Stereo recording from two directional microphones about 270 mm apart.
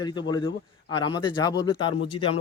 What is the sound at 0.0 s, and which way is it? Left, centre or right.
Speech, centre.